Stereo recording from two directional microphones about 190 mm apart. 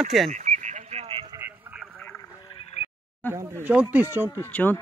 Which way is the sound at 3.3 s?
10° right (ahead or behind).